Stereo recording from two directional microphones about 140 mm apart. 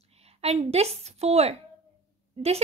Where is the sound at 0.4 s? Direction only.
50° right (ahead or behind).